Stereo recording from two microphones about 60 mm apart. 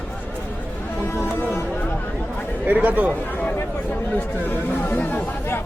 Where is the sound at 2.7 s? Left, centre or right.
Right.